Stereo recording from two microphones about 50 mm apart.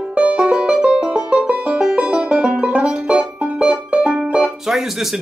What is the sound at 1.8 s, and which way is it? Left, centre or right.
Banjo, centre.